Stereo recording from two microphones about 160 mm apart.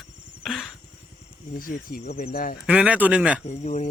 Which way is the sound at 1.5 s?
60° left (ahead or behind).